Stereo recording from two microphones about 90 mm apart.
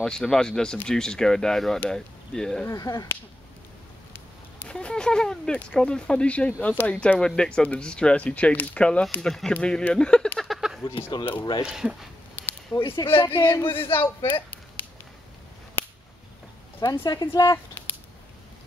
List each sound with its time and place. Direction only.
0.0 s speech: 5° left (ahead or behind)
2.7 s a woman's voice: 40° left (ahead or behind)
4.6 s speech: 10° left (ahead or behind)
10.4 s a sound: centre (ahead or behind)
11.0 s speech: 70° left (ahead or behind)
11.6 s speech: 5° right (ahead or behind)
12.4 s a sound: 20° left (ahead or behind)
12.8 s speech: 75° left (ahead or behind)
13.7 s speech: 90° left
13.9 s speech: 25° left (ahead or behind)
15.8 s a sound: 25° left (ahead or behind)
16.9 s a woman's voice: 55° left (ahead or behind)
17.8 s a sound: 25° left (ahead or behind)